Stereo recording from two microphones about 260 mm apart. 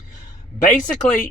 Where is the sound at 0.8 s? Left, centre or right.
Left.